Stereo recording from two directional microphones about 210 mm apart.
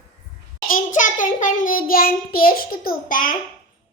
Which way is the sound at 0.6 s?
40° left (ahead or behind).